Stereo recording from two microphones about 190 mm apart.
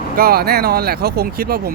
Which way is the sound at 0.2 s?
55° right (ahead or behind).